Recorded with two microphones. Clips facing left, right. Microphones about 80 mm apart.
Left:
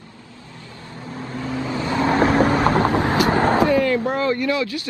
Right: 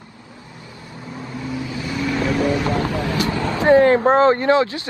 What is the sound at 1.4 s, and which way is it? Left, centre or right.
Vehicle, left.